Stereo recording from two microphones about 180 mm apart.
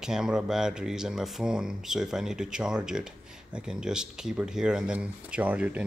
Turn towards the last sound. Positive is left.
turn(degrees=-5)  # may be behind; listen again after turning